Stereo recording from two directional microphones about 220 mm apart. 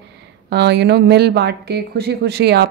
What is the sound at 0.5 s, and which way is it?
Speech, 50° right (ahead or behind).